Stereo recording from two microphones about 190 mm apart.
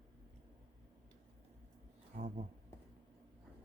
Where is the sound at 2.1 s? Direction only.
40° right (ahead or behind).